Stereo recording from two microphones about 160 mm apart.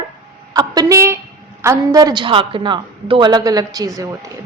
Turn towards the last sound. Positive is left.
turn(degrees=-20)  # may be behind; listen again after turning